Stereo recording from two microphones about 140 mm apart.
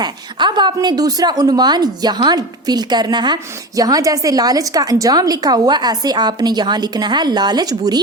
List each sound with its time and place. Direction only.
0.0 s a woman's voice: 30° right (ahead or behind)